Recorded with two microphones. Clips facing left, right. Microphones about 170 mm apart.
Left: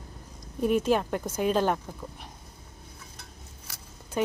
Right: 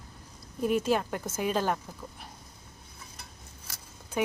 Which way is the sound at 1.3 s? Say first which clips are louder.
Left 4 dB; 10° right (ahead or behind).